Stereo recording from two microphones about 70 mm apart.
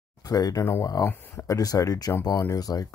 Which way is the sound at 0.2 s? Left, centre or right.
Left.